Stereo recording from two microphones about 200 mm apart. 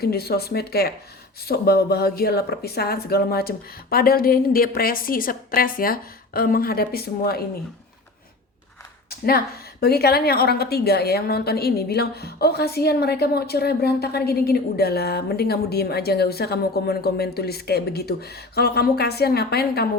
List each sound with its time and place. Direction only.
0.0 s a woman's voice: 50° left (ahead or behind)
9.0 s a sound: 50° left (ahead or behind)
9.8 s a woman's voice: 50° left (ahead or behind)